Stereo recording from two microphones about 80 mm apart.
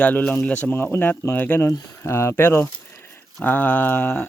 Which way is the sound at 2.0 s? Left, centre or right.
Left.